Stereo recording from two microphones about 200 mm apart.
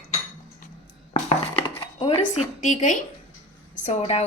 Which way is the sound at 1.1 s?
30° left (ahead or behind).